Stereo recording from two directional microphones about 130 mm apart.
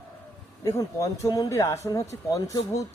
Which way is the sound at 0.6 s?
25° left (ahead or behind).